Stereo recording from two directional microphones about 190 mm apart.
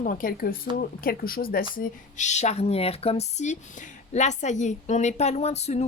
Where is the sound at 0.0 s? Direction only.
45° left (ahead or behind).